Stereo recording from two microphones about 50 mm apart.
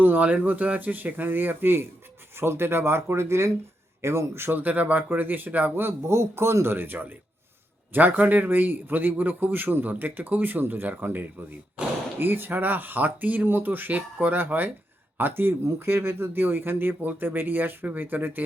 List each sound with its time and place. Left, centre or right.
0.0 s a man's voice: right
4.4 s a man's voice: right
5.7 s speech: right
6.1 s a man's voice: right